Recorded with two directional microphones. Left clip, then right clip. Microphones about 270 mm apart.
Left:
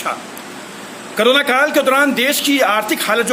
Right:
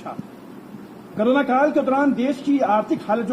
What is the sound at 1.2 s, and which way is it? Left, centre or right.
A man's voice, left.